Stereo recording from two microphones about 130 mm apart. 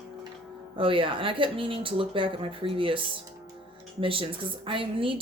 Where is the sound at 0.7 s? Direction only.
40° right (ahead or behind).